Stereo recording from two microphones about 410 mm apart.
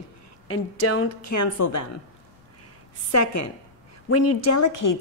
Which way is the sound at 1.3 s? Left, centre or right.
Left.